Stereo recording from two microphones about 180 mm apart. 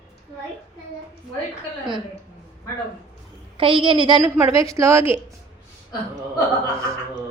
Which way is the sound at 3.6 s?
30° right (ahead or behind).